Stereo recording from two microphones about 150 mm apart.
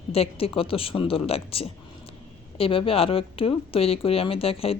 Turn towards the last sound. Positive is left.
turn(degrees=40)  # may be behind; listen again after turning